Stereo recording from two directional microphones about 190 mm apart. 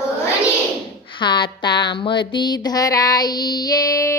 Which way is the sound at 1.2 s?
25° left (ahead or behind).